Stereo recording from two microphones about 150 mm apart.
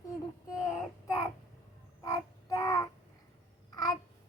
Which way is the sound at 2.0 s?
20° left (ahead or behind).